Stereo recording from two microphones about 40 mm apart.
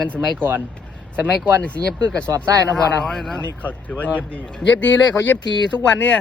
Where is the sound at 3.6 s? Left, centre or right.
Left.